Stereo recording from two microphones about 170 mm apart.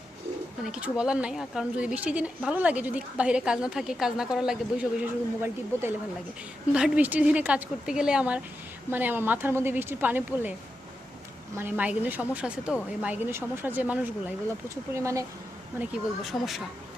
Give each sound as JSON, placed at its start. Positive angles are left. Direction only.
{"t": 0.6, "sound": "speech", "side_deg": -5}
{"t": 11.5, "sound": "speech", "side_deg": -10}